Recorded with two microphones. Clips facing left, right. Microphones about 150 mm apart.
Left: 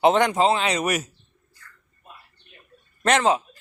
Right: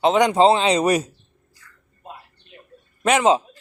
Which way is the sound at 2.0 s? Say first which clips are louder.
Right 9 dB; 90° right.